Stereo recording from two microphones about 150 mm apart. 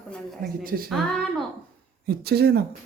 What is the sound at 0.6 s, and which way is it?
Speech, 75° right (ahead or behind).